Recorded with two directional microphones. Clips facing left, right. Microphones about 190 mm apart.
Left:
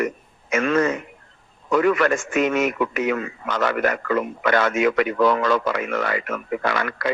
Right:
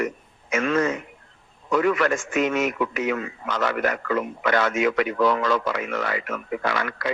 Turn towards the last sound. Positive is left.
turn(degrees=55)  # may be behind; listen again after turning